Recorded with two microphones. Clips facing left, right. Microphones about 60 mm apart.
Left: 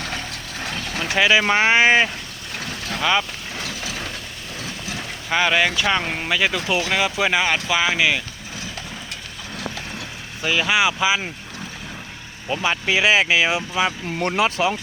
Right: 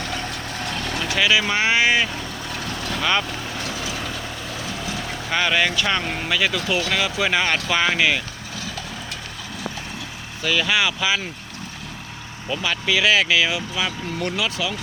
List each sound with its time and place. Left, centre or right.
1.0 s speech: left
3.0 s speech: centre
5.3 s speech: centre
10.4 s speech: centre
12.5 s speech: left